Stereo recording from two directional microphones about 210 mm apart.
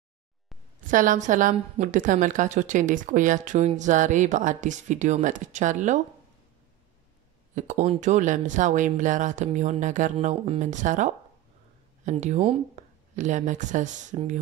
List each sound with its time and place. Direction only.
0.8 s a woman's voice: 40° right (ahead or behind)
7.5 s a woman's voice: 35° right (ahead or behind)